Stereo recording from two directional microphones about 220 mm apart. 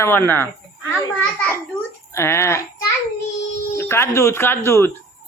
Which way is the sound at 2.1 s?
10° left (ahead or behind).